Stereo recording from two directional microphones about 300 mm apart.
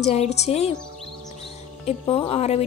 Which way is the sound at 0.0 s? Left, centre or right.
Left.